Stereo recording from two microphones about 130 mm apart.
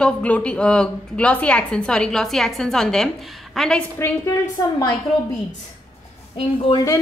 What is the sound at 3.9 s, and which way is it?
Speech, 20° left (ahead or behind).